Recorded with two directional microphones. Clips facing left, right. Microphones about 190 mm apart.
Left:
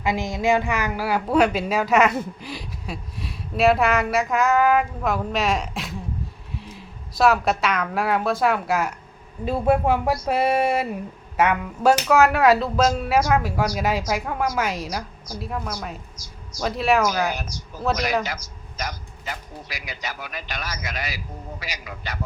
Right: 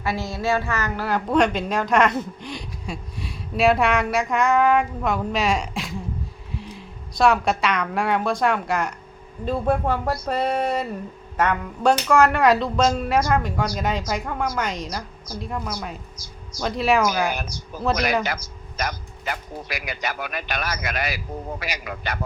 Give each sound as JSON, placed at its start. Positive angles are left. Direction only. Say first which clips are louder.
{"t": 0.0, "sound": "a woman's voice", "louder": "left 2 dB", "side_deg": 15}
{"t": 17.3, "sound": "speech", "louder": "right 2 dB", "side_deg": -60}